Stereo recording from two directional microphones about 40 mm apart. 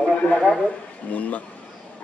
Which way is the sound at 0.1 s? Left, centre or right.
Left.